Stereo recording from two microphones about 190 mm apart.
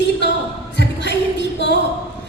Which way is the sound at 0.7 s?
65° left (ahead or behind).